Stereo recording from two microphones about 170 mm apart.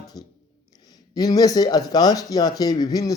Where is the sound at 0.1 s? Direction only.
25° left (ahead or behind).